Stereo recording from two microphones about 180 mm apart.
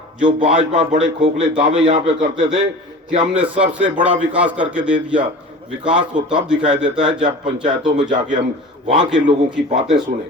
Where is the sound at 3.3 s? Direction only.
10° right (ahead or behind).